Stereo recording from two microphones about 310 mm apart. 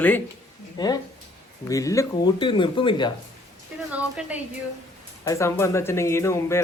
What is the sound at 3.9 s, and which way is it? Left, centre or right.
Speech, centre.